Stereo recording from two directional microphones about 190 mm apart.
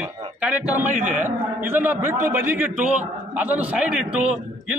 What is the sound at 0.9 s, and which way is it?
Speech, 40° right (ahead or behind).